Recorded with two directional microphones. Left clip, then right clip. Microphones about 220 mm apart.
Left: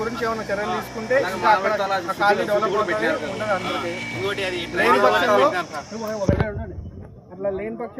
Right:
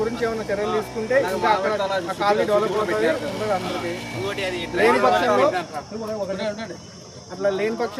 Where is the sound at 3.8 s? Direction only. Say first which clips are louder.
Left 1 dB; 35° right (ahead or behind).